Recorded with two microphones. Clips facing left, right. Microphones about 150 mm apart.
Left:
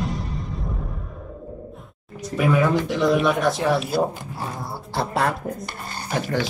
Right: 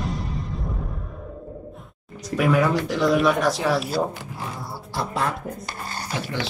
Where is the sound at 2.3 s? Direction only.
Centre (ahead or behind).